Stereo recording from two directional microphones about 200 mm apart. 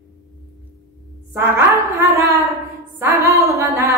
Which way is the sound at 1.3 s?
10° right (ahead or behind).